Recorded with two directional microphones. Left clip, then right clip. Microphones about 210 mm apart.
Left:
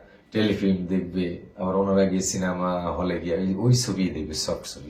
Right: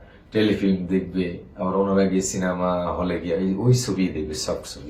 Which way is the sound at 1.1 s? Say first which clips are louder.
Right 2 dB; centre (ahead or behind).